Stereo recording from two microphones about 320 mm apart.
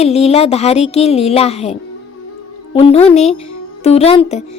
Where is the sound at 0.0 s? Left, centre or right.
Centre.